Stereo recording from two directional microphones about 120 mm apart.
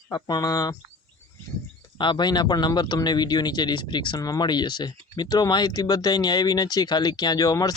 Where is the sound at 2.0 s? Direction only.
40° left (ahead or behind).